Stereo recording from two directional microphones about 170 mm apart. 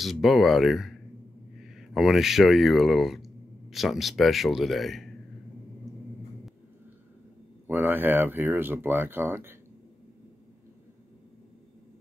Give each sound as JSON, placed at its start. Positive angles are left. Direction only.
{"t": 0.0, "sound": "speech", "side_deg": 0}
{"t": 7.6, "sound": "speech", "side_deg": -10}